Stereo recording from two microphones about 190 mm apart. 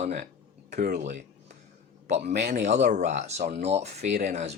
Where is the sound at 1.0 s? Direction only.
40° right (ahead or behind).